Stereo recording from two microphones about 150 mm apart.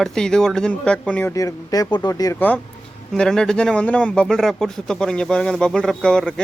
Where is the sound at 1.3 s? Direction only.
25° left (ahead or behind).